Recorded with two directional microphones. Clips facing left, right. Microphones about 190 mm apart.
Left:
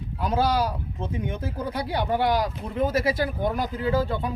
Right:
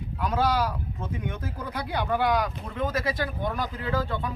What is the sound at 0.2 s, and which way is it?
Speech, 30° left (ahead or behind).